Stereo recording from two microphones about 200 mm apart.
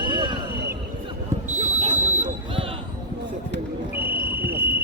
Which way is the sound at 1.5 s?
35° right (ahead or behind).